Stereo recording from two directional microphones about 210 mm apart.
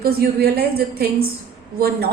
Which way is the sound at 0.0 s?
50° right (ahead or behind).